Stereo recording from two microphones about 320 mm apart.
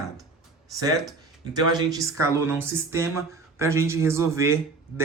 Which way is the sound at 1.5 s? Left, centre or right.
Centre.